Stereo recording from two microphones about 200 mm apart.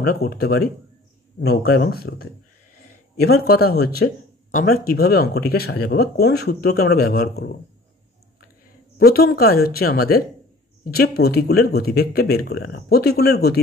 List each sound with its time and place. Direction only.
0.0 s speech: 50° left (ahead or behind)
3.4 s speech: 50° left (ahead or behind)
8.9 s speech: 50° left (ahead or behind)